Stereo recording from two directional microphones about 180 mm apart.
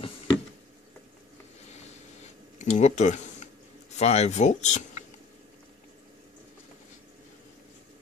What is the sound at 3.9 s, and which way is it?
Speech, 40° left (ahead or behind).